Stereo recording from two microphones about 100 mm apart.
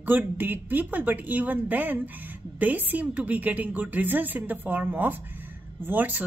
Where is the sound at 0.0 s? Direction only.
20° right (ahead or behind).